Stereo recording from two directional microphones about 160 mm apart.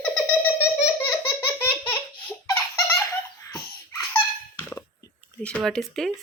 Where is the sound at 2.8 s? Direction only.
20° left (ahead or behind).